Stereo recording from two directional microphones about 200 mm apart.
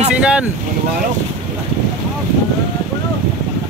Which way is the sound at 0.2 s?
5° right (ahead or behind).